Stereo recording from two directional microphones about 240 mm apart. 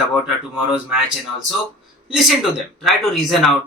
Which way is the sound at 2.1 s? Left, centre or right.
Centre.